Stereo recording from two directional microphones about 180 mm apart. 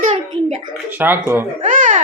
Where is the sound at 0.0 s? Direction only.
40° right (ahead or behind).